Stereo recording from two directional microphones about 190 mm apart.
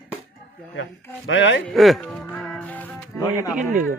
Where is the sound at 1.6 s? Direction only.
Centre (ahead or behind).